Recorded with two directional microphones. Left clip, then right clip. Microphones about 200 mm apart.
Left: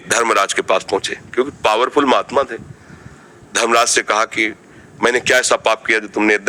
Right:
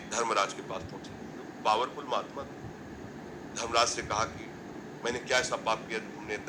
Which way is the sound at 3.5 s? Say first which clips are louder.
Left 15 dB; 60° left (ahead or behind).